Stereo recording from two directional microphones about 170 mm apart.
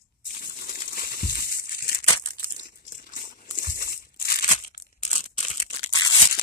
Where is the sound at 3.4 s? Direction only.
55° left (ahead or behind).